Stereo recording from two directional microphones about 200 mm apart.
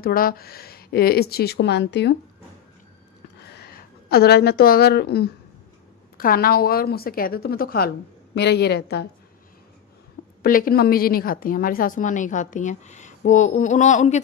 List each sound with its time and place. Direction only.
0.0 s speech: 45° left (ahead or behind)
3.4 s a woman's voice: 55° left (ahead or behind)
10.4 s a woman's voice: 45° left (ahead or behind)